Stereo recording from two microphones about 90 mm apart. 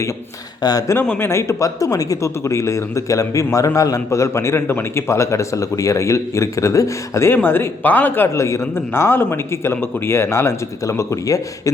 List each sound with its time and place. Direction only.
0.6 s speech: 45° left (ahead or behind)
1.2 s speech: 30° left (ahead or behind)